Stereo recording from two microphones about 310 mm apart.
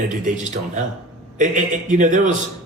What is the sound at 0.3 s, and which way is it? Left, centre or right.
A man's voice, right.